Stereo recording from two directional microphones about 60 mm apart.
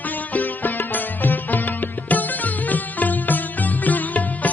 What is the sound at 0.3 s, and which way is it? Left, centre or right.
Music, left.